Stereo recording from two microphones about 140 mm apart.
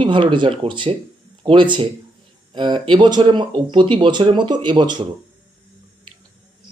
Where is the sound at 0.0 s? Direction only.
35° right (ahead or behind).